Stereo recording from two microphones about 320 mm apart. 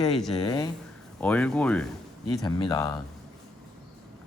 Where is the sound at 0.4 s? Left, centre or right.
Centre.